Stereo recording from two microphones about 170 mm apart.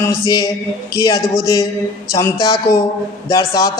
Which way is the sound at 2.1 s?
20° left (ahead or behind).